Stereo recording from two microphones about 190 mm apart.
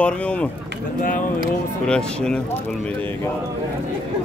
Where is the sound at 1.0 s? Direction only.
45° left (ahead or behind).